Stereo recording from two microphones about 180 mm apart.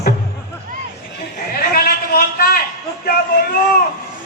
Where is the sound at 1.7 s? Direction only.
55° left (ahead or behind).